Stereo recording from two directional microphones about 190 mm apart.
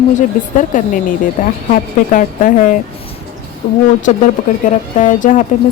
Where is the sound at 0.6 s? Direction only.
45° left (ahead or behind).